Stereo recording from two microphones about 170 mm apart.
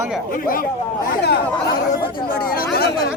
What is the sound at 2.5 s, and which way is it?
Speech, 65° left (ahead or behind).